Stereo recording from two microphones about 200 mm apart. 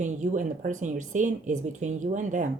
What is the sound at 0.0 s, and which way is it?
Speech, 40° right (ahead or behind).